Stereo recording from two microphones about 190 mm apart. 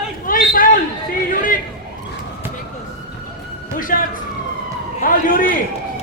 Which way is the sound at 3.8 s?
45° left (ahead or behind).